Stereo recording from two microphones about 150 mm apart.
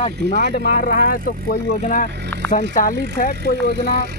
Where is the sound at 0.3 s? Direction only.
70° left (ahead or behind).